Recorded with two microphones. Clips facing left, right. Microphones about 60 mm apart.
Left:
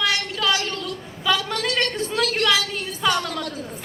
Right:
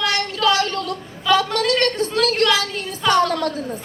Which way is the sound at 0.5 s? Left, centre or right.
Right.